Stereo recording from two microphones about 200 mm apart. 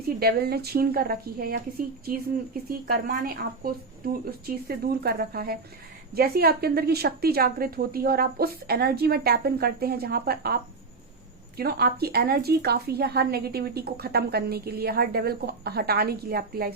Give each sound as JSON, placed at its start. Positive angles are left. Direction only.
{"t": 0.2, "sound": "speech", "side_deg": -50}
{"t": 2.6, "sound": "speech", "side_deg": -45}